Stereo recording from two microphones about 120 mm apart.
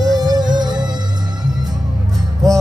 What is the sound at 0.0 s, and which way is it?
Music, 35° right (ahead or behind).